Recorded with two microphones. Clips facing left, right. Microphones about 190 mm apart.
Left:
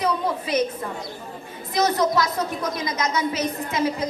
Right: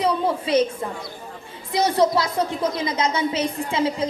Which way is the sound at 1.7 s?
30° right (ahead or behind).